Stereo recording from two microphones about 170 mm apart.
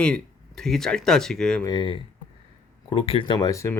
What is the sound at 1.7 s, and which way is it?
Speech, 30° left (ahead or behind).